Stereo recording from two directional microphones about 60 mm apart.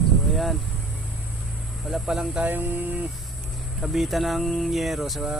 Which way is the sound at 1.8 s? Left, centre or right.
Centre.